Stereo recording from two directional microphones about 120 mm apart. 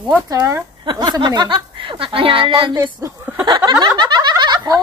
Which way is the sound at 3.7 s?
40° right (ahead or behind).